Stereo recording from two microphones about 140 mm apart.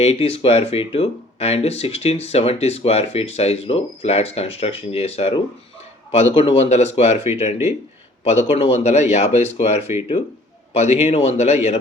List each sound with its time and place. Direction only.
0.0 s speech: 45° left (ahead or behind)